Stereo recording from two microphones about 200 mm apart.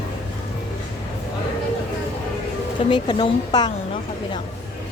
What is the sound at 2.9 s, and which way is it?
Speech, 25° left (ahead or behind).